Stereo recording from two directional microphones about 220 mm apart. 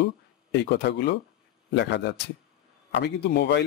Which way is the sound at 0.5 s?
50° left (ahead or behind).